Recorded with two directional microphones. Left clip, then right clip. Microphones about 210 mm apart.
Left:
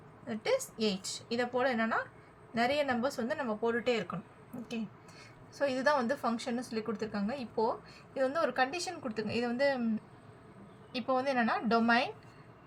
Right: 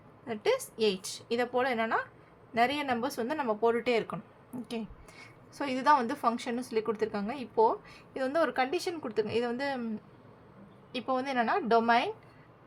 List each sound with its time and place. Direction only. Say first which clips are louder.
0.3 s speech: right 2 dB; 40° right (ahead or behind)
5.6 s a woman's voice: right 3 dB; 45° right (ahead or behind)
10.9 s a woman's voice: even; 35° right (ahead or behind)